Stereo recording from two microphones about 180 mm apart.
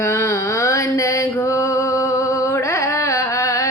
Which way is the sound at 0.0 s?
15° left (ahead or behind).